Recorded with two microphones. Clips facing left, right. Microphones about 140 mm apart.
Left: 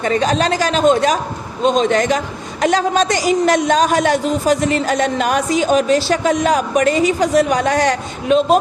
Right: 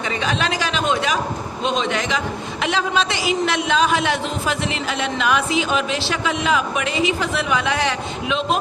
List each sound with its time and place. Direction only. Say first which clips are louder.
0.0 s a man's voice: left 7 dB; 45° left (ahead or behind)